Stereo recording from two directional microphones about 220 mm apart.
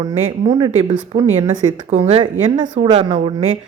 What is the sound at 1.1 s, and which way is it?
Speech, 40° right (ahead or behind).